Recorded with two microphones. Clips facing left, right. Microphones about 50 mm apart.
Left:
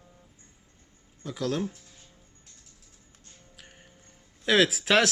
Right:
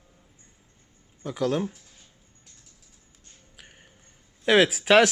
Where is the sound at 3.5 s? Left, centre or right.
Centre.